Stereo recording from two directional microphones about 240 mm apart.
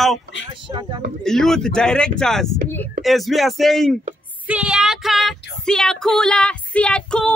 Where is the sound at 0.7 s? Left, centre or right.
Centre.